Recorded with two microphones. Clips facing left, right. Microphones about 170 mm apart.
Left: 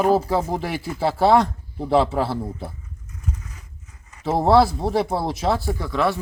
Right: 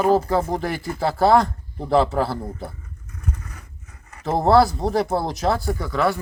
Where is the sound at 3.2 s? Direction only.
60° right (ahead or behind).